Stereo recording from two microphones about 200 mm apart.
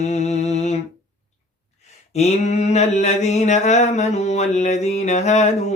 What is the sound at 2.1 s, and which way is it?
Mantra, 35° left (ahead or behind).